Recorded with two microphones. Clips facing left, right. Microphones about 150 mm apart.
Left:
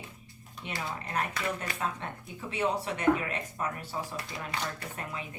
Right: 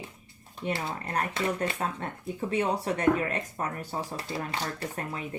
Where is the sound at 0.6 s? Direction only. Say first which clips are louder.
Right 5 dB; 30° right (ahead or behind).